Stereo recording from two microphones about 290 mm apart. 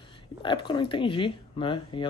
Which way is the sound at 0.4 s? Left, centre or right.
Centre.